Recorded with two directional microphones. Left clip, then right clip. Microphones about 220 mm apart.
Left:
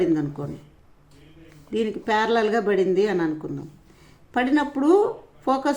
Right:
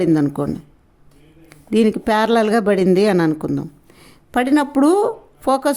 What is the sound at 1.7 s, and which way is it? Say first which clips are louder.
Speech: right 7 dB; 50° right (ahead or behind).